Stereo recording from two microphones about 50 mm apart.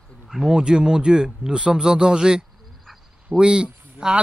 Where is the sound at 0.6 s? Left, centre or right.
Centre.